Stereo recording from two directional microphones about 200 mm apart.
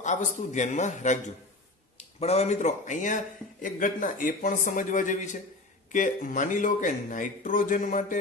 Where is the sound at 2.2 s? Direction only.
35° left (ahead or behind).